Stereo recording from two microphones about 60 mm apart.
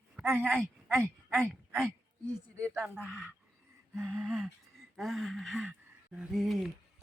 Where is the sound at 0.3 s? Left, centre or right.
Right.